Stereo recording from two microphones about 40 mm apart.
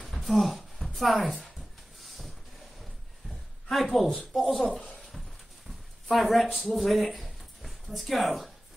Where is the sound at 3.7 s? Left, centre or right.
Centre.